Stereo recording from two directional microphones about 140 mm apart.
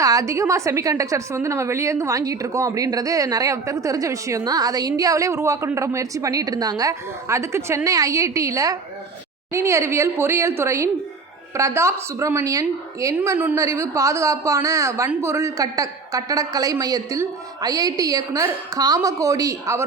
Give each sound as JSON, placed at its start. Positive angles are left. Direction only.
{"t": 0.0, "sound": "a woman's voice", "side_deg": -25}